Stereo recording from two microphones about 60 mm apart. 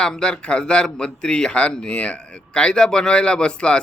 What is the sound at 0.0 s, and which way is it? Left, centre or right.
Speech, centre.